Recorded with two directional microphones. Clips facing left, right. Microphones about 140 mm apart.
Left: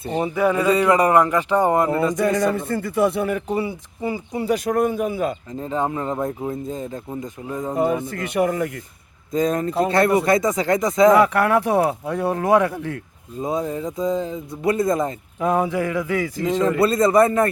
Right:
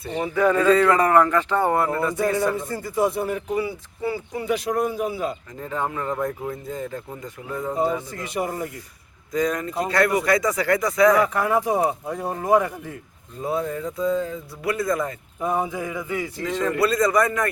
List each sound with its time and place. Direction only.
0.3 s speech: 10° left (ahead or behind)
2.1 s speech: 80° left
3.5 s speech: 25° left (ahead or behind)
4.4 s a man's voice: 45° left (ahead or behind)
5.5 s speech: 25° left (ahead or behind)
8.1 s speech: 60° left (ahead or behind)
9.3 s speech: 25° left (ahead or behind)
11.2 s speech: 75° left (ahead or behind)
13.4 s speech: 20° left (ahead or behind)
15.4 s speech: 90° left
16.6 s speech: 30° left (ahead or behind)